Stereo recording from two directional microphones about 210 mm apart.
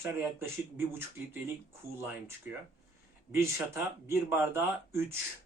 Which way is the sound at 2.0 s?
10° right (ahead or behind).